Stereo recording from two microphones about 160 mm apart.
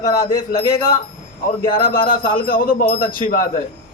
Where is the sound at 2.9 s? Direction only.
70° left (ahead or behind).